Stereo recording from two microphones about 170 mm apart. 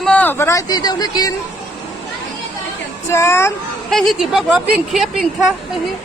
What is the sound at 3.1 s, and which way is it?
Speech, 15° left (ahead or behind).